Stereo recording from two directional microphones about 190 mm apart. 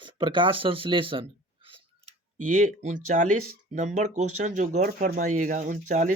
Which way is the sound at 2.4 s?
40° right (ahead or behind).